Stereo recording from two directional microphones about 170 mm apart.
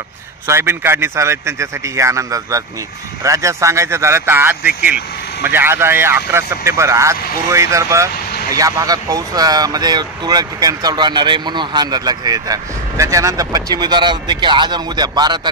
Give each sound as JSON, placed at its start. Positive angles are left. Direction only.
{"t": 0.5, "sound": "speech", "side_deg": -15}